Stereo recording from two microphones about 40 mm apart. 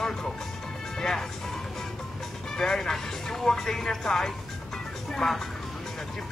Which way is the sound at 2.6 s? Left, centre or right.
Centre.